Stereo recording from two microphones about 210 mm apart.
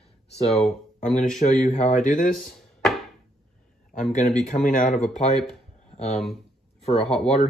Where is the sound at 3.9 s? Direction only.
35° left (ahead or behind).